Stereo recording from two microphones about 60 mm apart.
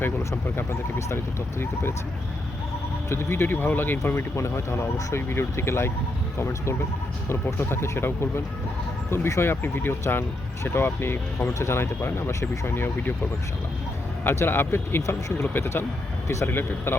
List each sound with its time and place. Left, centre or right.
0.5 s speech: left
3.1 s speech: left
12.6 s speech: left
14.3 s speech: left